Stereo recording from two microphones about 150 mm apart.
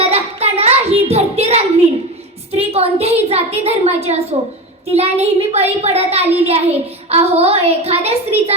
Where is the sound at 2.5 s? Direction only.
45° right (ahead or behind).